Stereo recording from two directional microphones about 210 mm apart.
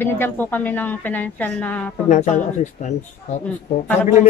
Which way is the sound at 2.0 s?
35° left (ahead or behind).